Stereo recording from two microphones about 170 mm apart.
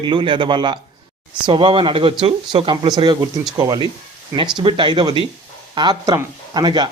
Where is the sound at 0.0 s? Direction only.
25° right (ahead or behind).